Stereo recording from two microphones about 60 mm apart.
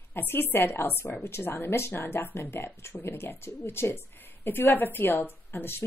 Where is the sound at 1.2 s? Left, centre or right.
Left.